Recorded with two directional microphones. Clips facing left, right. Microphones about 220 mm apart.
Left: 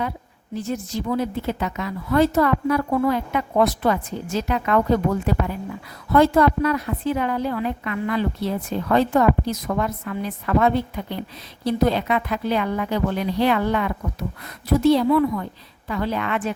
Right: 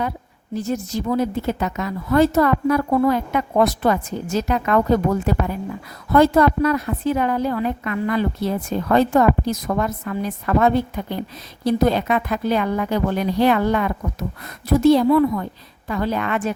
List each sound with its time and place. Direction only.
0.5 s a woman's voice: 40° right (ahead or behind)